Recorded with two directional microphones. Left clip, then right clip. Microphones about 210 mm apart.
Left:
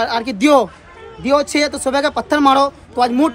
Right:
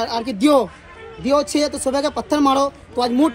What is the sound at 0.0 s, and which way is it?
A man's voice, 20° left (ahead or behind).